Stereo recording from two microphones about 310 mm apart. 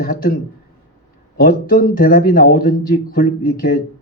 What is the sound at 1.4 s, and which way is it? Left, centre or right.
Speech, left.